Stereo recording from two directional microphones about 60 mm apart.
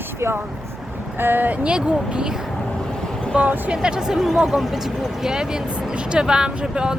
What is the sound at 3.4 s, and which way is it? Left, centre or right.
Speech, right.